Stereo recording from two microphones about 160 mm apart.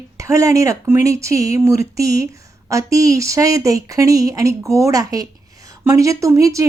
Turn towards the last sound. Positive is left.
turn(degrees=-20)  # may be behind; listen again after turning